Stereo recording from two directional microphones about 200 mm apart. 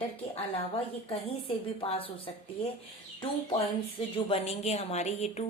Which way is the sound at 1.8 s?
25° left (ahead or behind).